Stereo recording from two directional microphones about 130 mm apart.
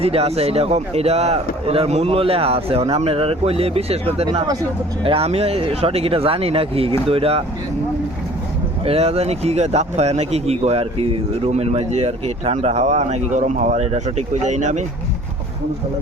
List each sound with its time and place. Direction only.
0.0 s speech: 50° right (ahead or behind)
8.8 s speech: 50° right (ahead or behind); by 14.8 s 65° right (ahead or behind)